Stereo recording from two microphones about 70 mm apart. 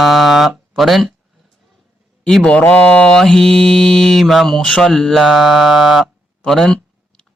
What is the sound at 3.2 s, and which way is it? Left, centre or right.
Mantra, centre.